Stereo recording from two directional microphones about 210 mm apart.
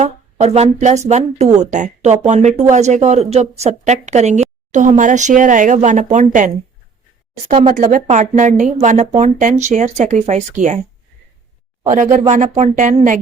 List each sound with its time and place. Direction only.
0.0 s speech: 30° right (ahead or behind)
7.7 s speech: 40° right (ahead or behind)
12.3 s speech: 35° right (ahead or behind)